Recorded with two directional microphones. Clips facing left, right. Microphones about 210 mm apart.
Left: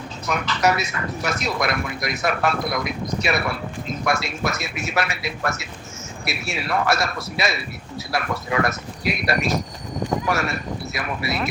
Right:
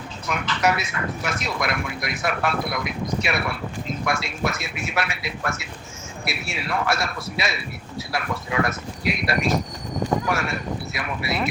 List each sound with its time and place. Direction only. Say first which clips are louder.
0.3 s speech: left 2 dB; 40° left (ahead or behind)